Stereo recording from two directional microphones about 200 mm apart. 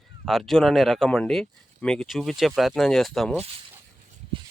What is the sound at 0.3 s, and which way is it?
Speech, centre (ahead or behind).